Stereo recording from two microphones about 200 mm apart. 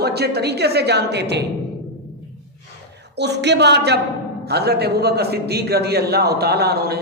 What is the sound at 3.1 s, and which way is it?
A man's voice, 60° right (ahead or behind).